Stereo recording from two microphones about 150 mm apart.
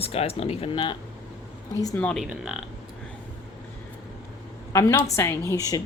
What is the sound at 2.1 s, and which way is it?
Speech, 5° right (ahead or behind).